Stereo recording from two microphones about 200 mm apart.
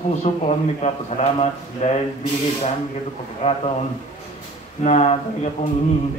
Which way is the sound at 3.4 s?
30° left (ahead or behind).